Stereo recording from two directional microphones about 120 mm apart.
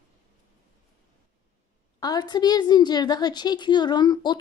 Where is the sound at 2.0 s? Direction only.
35° left (ahead or behind).